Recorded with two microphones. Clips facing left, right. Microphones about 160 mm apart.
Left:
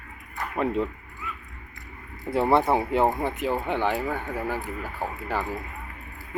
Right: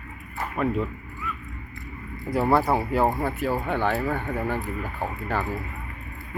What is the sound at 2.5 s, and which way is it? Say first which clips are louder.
Speech: left 1 dB; 25° left (ahead or behind).